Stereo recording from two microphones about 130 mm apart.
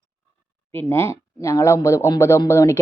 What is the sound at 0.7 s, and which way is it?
Speech, 15° left (ahead or behind).